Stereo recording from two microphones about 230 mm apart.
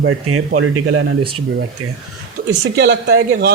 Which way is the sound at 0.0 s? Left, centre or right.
Right.